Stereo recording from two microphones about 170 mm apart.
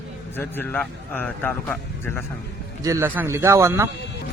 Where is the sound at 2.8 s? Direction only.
15° right (ahead or behind).